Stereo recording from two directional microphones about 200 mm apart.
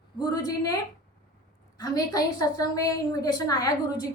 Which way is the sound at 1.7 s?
20° left (ahead or behind).